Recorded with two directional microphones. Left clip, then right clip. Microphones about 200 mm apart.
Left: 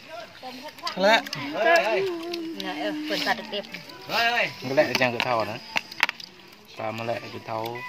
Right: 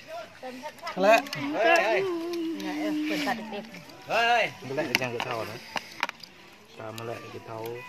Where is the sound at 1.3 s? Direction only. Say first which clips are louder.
Left 2 dB; 60° right (ahead or behind).